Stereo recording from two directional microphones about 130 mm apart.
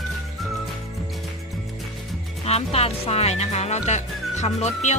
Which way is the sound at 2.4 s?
55° left (ahead or behind).